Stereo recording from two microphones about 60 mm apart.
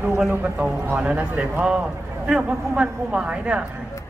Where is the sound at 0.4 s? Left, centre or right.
Right.